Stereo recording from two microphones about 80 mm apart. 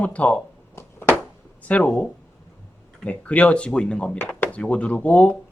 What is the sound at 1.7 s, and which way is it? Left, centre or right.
Speech, centre.